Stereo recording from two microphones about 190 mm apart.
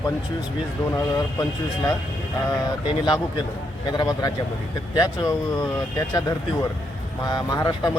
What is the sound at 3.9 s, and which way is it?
Speech, 20° left (ahead or behind).